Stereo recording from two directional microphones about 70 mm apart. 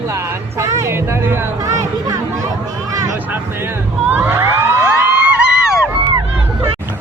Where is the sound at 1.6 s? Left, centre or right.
Right.